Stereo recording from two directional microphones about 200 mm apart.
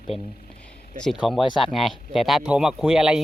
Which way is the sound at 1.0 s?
Centre (ahead or behind).